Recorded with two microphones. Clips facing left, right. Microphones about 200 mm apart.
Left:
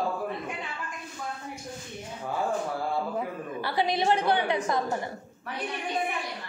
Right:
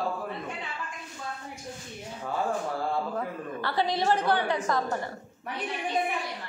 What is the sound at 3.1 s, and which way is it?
A woman's voice, 10° left (ahead or behind).